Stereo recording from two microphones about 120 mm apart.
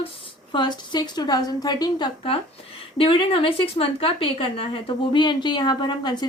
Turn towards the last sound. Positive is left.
turn(degrees=35)  # may be behind; listen again after turning